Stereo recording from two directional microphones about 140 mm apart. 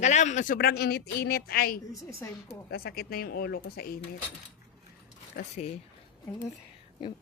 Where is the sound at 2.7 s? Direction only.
90° left.